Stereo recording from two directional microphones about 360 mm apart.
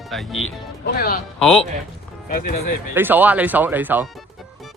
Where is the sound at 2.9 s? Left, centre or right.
Centre.